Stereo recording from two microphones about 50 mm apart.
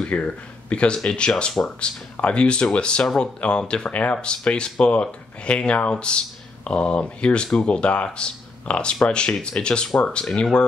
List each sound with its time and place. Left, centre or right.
0.0 s speech: left